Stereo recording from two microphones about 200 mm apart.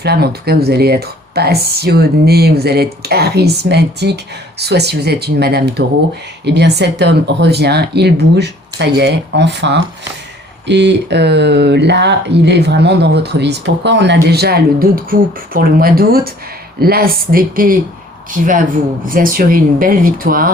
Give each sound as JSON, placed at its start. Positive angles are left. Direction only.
{"t": 0.0, "sound": "speech", "side_deg": -55}
{"t": 19.0, "sound": "speech", "side_deg": -45}